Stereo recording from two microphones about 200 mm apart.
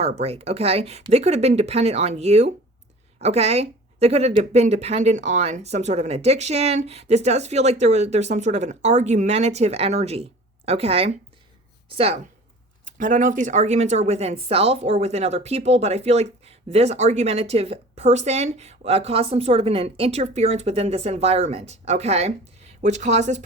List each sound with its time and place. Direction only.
0.0 s a woman's voice: 30° right (ahead or behind)